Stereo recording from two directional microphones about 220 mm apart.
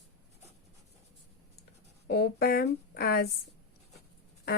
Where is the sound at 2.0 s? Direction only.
45° left (ahead or behind).